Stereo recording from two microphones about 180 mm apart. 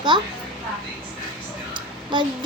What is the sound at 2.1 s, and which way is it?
Speech, 25° right (ahead or behind).